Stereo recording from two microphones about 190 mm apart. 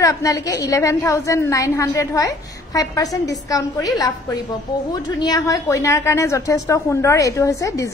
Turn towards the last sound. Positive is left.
turn(degrees=15)  # may be behind; listen again after turning